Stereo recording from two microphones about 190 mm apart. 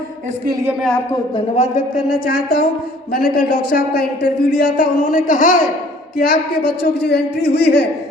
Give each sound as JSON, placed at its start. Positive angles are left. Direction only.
{"t": 0.8, "sound": "a man's voice", "side_deg": 5}
{"t": 1.5, "sound": "speech", "side_deg": 40}